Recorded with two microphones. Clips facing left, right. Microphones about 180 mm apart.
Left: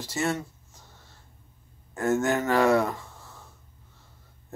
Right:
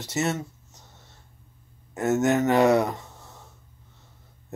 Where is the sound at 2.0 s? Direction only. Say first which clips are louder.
Right 3 dB; 20° right (ahead or behind).